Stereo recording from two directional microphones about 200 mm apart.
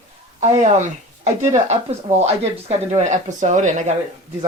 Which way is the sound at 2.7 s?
35° right (ahead or behind).